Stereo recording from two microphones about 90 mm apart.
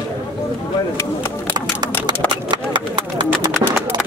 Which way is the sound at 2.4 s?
60° right (ahead or behind).